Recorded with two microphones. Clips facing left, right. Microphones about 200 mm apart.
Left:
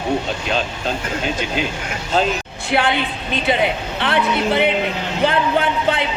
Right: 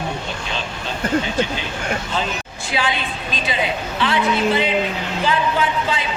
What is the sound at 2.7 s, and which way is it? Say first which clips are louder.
Speech: left 5 dB; 60° left (ahead or behind).